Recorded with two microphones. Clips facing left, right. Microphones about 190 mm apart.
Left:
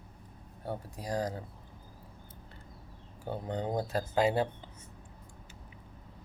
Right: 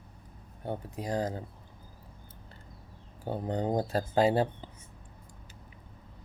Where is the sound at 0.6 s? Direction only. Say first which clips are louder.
Right 3 dB; 20° right (ahead or behind).